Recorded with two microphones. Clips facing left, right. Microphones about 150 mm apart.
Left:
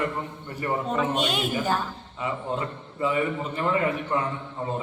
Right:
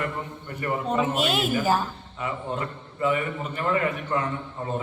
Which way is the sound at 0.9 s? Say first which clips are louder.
Right 3 dB; 5° right (ahead or behind).